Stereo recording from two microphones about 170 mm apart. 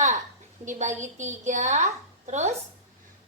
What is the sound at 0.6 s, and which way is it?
A woman's voice, 45° right (ahead or behind).